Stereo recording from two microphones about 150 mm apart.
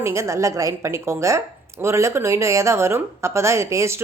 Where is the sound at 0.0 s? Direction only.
20° right (ahead or behind).